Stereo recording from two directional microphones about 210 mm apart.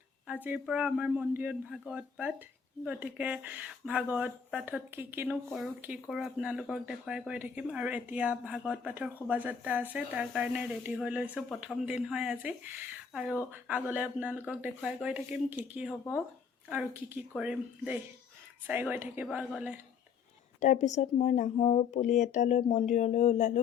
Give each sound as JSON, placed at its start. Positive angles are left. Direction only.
{"t": 0.4, "sound": "speech", "side_deg": -5}
{"t": 20.6, "sound": "speech", "side_deg": 35}